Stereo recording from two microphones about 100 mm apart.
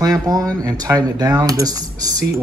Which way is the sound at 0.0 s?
40° right (ahead or behind).